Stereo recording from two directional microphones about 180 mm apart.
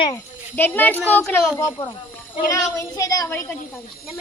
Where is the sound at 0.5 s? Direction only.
10° left (ahead or behind).